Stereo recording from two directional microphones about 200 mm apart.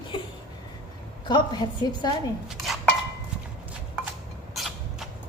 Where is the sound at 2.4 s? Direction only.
Centre (ahead or behind).